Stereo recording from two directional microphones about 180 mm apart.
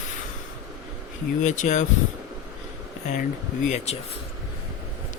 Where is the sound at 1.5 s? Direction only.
40° left (ahead or behind).